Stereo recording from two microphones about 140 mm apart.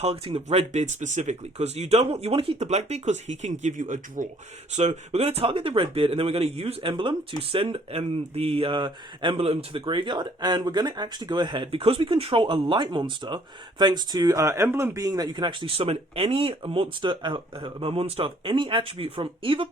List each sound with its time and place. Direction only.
0.0 s speech: 45° right (ahead or behind)
0.4 s speech: 55° right (ahead or behind)
4.7 s speech: 50° right (ahead or behind)